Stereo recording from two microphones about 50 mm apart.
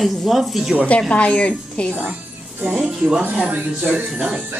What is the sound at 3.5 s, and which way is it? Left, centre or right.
Speech, right.